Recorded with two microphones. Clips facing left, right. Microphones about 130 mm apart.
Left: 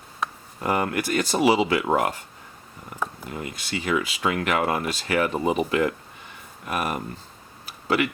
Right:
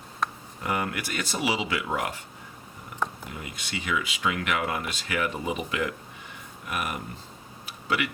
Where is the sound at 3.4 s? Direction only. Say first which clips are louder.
Left 6 dB; 40° left (ahead or behind).